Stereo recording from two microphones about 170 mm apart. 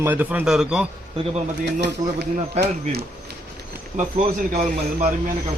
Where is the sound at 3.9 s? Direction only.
45° right (ahead or behind).